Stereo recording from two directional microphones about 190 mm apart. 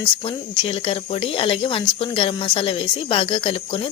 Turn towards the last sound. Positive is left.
turn(degrees=30)  # may be behind; listen again after turning